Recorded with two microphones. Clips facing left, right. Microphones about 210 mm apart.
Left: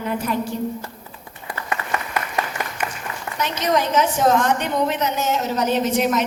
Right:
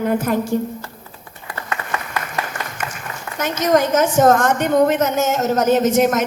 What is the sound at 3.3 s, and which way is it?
A woman's voice, 45° right (ahead or behind).